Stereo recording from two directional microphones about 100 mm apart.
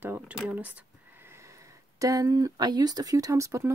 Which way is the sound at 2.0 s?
35° right (ahead or behind).